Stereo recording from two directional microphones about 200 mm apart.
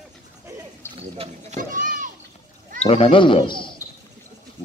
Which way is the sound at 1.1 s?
30° right (ahead or behind).